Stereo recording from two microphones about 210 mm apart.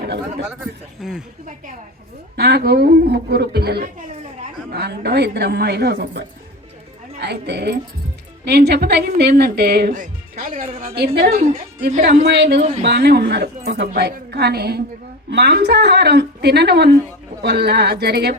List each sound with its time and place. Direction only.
1.0 s a woman's voice: centre (ahead or behind)
2.3 s speech: 50° right (ahead or behind)
11.3 s a woman's voice: 35° right (ahead or behind)
12.2 s speech: 50° right (ahead or behind)